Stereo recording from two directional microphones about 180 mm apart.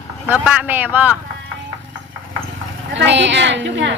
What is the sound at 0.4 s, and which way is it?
Speech, 10° right (ahead or behind).